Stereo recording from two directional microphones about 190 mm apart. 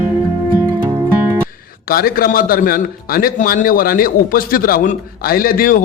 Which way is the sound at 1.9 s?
50° left (ahead or behind).